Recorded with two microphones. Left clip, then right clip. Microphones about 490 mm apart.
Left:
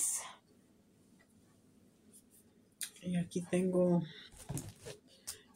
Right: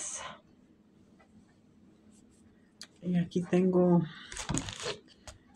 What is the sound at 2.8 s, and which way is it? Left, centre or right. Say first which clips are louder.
Speech: right 5 dB; left.